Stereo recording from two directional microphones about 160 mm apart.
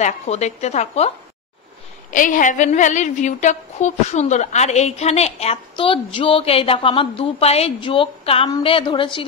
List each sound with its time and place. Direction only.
0.0 s a woman's voice: 45° left (ahead or behind)
2.0 s a woman's voice: 55° left (ahead or behind); by 9.2 s 30° left (ahead or behind)